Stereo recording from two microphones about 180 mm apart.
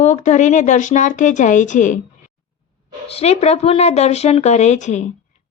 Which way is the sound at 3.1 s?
35° left (ahead or behind).